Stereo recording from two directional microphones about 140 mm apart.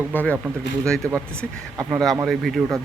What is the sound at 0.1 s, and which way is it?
Speech, 10° left (ahead or behind).